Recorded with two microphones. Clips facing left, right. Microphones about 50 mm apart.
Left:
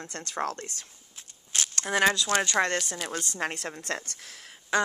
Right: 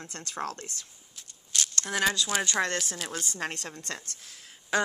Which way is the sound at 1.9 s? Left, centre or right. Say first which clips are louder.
Left 4 dB; left.